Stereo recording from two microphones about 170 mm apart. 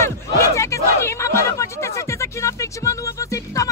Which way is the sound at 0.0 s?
15° left (ahead or behind).